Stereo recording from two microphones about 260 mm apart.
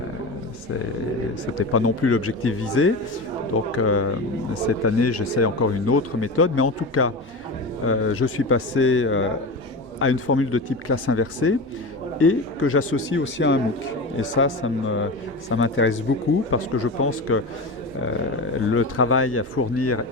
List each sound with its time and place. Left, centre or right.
1.7 s a man's voice: left
18.7 s speech: left